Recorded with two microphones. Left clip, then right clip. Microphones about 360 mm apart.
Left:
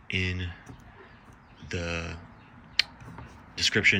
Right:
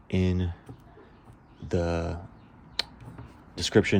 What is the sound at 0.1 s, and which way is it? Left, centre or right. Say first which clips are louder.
Speech: even; centre.